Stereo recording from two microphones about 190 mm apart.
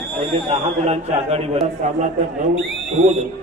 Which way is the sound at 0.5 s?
35° right (ahead or behind).